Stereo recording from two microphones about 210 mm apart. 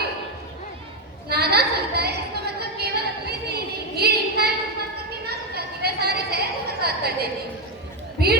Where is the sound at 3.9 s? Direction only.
50° right (ahead or behind).